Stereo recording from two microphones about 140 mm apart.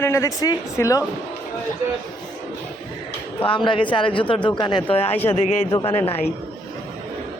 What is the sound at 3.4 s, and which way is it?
Speech, 35° left (ahead or behind).